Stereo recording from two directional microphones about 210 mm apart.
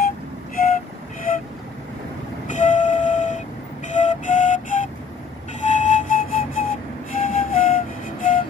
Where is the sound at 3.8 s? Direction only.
35° left (ahead or behind).